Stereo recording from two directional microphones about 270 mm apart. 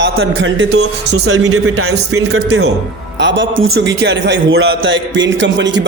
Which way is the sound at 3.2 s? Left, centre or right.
Right.